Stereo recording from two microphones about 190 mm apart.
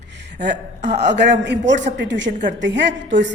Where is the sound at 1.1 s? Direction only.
65° right (ahead or behind).